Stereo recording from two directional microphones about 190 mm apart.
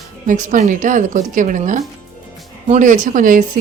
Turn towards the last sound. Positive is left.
turn(degrees=-45)  # may be behind; listen again after turning